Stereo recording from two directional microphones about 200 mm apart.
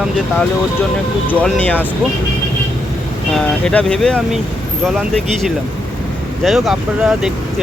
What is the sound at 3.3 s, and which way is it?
Speech, 5° left (ahead or behind).